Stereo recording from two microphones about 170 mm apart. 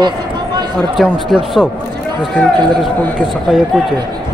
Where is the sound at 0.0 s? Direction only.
25° right (ahead or behind).